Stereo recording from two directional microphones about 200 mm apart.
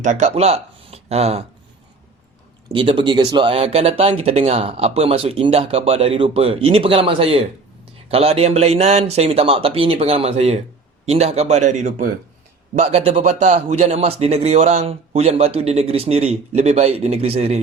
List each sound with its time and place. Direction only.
0.0 s speech: 35° right (ahead or behind)
2.6 s a man's voice: 25° right (ahead or behind)